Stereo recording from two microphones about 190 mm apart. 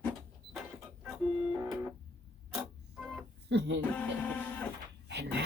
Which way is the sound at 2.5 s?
Centre (ahead or behind).